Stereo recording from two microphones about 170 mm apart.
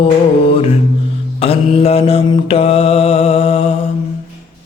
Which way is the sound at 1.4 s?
35° left (ahead or behind).